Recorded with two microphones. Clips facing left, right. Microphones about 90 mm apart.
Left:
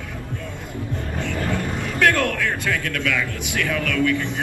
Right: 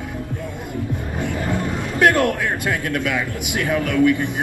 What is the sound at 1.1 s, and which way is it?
Speech, 15° right (ahead or behind).